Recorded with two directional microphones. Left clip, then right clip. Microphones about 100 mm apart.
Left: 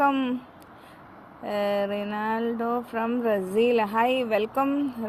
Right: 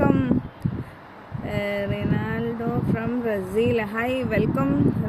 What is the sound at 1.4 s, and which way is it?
Speech, 35° right (ahead or behind).